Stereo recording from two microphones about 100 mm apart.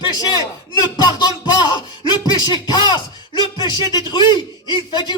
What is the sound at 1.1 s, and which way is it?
Music, 45° left (ahead or behind).